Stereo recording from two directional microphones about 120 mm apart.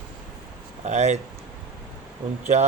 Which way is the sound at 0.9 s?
70° right (ahead or behind).